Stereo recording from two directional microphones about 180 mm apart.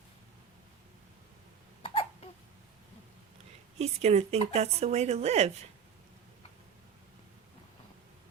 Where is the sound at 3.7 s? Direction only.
35° right (ahead or behind).